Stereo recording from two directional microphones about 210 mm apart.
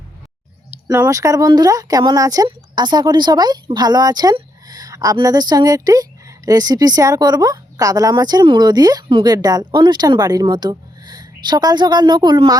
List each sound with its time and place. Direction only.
0.9 s speech: 15° right (ahead or behind)